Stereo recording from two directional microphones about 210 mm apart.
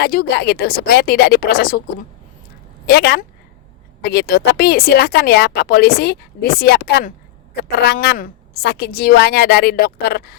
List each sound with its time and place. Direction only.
0.0 s a woman's voice: 50° left (ahead or behind)
2.8 s a woman's voice: 50° left (ahead or behind)